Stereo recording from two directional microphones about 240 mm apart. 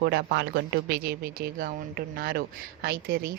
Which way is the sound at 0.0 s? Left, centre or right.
Right.